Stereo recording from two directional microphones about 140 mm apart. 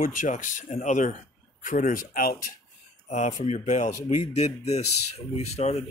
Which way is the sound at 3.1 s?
60° left (ahead or behind).